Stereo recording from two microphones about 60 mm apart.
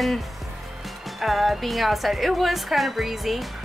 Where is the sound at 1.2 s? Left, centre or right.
Centre.